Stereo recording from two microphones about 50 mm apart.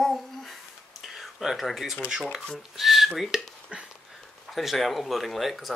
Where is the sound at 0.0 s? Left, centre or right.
Centre.